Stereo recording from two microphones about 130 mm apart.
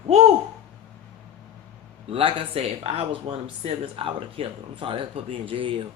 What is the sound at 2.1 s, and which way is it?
Speech, 45° right (ahead or behind).